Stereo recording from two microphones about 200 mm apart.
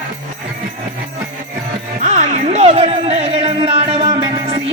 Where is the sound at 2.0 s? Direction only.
35° right (ahead or behind).